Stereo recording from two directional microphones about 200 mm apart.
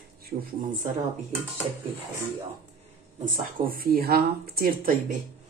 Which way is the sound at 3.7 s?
50° right (ahead or behind).